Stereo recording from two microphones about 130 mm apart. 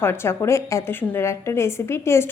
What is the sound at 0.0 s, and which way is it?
Speech, 20° left (ahead or behind).